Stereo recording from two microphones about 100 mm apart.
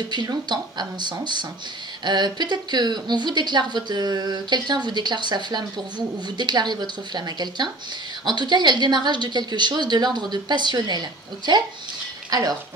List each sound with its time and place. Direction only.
0.1 s a woman's voice: 50° right (ahead or behind)